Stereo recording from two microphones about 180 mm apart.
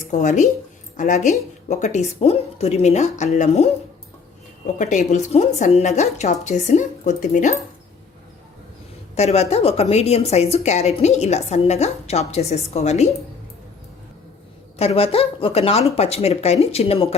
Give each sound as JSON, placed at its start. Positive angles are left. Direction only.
{"t": 0.1, "sound": "speech", "side_deg": 45}
{"t": 4.8, "sound": "speech", "side_deg": 40}
{"t": 9.1, "sound": "speech", "side_deg": 35}
{"t": 14.8, "sound": "speech", "side_deg": 35}